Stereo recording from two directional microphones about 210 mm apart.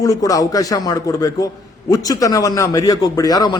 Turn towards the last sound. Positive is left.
turn(degrees=20)  # may be behind; listen again after turning